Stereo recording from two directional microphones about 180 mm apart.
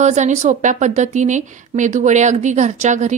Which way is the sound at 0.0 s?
40° right (ahead or behind).